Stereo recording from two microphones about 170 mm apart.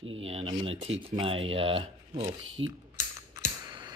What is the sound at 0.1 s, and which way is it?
Speech, 35° right (ahead or behind).